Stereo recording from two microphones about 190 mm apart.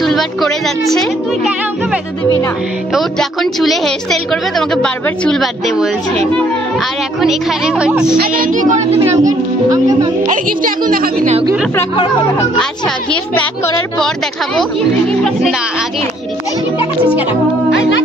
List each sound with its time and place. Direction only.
0.0 s a woman's voice: centre (ahead or behind)
7.2 s a woman's voice: centre (ahead or behind)
8.2 s a woman's voice: 45° right (ahead or behind)
9.1 s a child's voice: 20° right (ahead or behind)
10.2 s a woman's voice: 45° right (ahead or behind)
12.5 s a woman's voice: 5° left (ahead or behind)
17.6 s speech: 75° left (ahead or behind)